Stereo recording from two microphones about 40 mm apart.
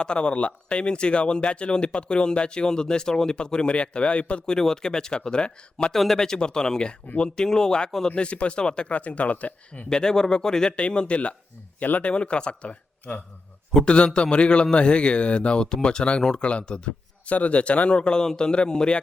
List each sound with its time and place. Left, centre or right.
0.0 s speech: left
4.4 s speech: centre
5.9 s speech: centre
8.1 s speech: left
8.9 s a man's voice: left
9.9 s speech: centre
11.8 s a man's voice: left
12.1 s speech: left
17.2 s speech: left